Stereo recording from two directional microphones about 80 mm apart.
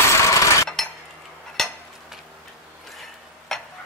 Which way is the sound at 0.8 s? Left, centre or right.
Centre.